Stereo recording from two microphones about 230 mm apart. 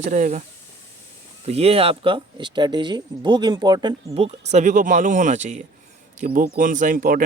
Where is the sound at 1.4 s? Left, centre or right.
Right.